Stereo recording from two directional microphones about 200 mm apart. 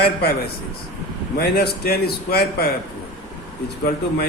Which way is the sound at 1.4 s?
50° left (ahead or behind).